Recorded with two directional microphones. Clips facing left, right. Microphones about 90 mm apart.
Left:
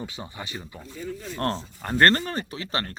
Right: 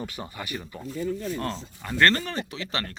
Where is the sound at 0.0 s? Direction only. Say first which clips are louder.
Right 1 dB; 20° left (ahead or behind).